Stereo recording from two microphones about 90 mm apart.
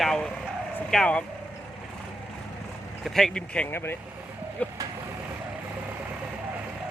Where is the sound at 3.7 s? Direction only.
25° left (ahead or behind).